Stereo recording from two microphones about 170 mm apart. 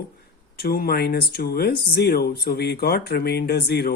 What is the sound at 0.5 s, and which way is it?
Speech, 65° left (ahead or behind).